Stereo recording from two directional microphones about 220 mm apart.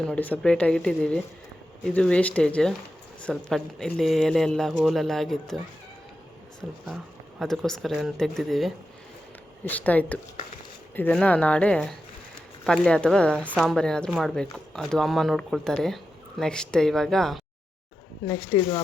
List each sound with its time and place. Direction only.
0.0 s speech: 5° left (ahead or behind)
6.6 s speech: centre (ahead or behind)
18.3 s speech: 15° left (ahead or behind)